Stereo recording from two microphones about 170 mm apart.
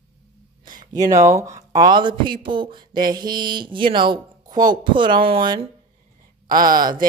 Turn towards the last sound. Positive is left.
turn(degrees=-25)  # may be behind; listen again after turning